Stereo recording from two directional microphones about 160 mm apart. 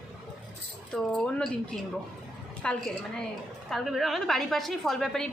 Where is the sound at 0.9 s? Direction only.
5° left (ahead or behind).